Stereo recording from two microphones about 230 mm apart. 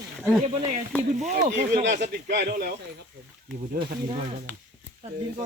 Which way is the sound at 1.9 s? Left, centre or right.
Right.